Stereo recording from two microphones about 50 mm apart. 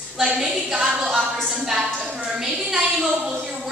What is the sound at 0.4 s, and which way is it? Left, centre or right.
Speech, centre.